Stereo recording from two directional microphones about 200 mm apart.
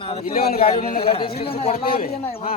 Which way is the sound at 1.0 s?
30° left (ahead or behind).